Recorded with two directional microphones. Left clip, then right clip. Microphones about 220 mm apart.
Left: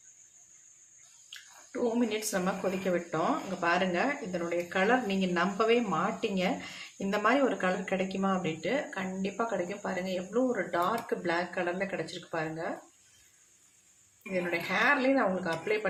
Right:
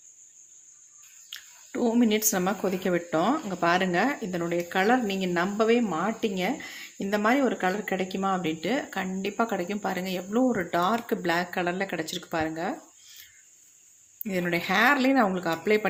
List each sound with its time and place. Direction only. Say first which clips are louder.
1.3 s speech: right 4 dB; 40° right (ahead or behind)
14.5 s speech: right 5 dB; 45° right (ahead or behind)